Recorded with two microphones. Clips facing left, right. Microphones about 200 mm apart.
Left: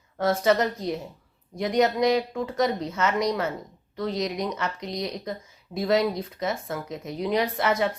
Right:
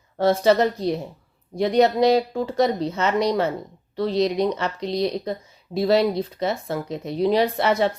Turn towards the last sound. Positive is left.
turn(degrees=-30)  # may be behind; listen again after turning